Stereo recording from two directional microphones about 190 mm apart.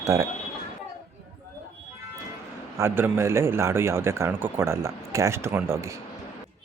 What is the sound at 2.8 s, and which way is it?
A man's voice, 10° right (ahead or behind).